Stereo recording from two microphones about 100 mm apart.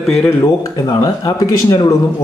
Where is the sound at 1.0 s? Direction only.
40° left (ahead or behind).